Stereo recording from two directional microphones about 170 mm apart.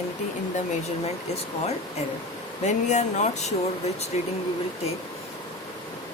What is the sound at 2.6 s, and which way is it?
Speech, 45° left (ahead or behind).